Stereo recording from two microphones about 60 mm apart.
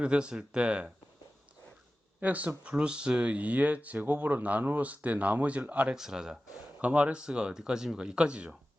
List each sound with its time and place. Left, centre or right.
0.0 s speech: centre
2.2 s speech: right
5.9 s speech: centre
6.8 s speech: right